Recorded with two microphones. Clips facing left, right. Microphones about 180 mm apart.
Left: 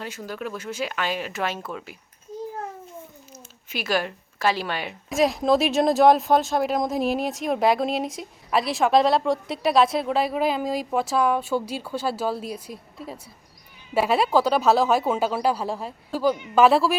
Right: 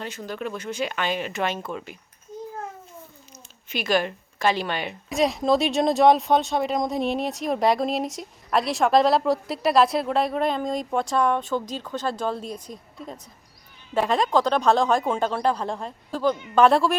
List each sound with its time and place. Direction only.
0.0 s a woman's voice: 5° left (ahead or behind)
3.7 s a woman's voice: 5° left (ahead or behind)